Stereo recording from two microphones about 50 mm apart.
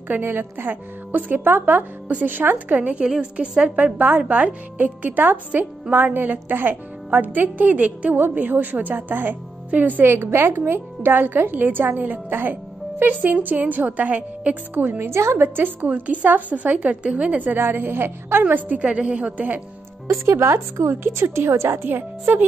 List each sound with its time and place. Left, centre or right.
0.1 s a woman's voice: right
2.7 s a woman's voice: right
8.2 s a woman's voice: right
10.0 s a woman's voice: right
14.9 s a woman's voice: right
15.4 s a woman's voice: right
15.8 s a woman's voice: right
18.4 s a woman's voice: right
20.1 s speech: right
20.9 s a woman's voice: right